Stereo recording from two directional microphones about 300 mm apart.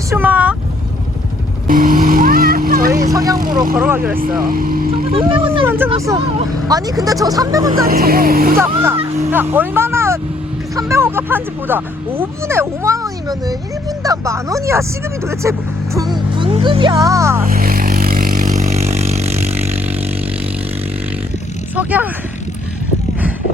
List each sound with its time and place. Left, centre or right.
0.1 s speech: centre
1.6 s vehicle: right
3.1 s vehicle: centre
3.8 s speech: centre
4.4 s speech: right
5.1 s speech: centre
5.5 s a sound: centre
6.7 s speech: centre
7.9 s speech: right
8.5 s speech: centre
16.0 s music: centre
17.4 s vehicle: right
21.8 s speech: centre